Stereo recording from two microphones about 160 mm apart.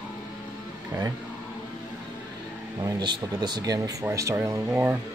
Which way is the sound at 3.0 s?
25° right (ahead or behind).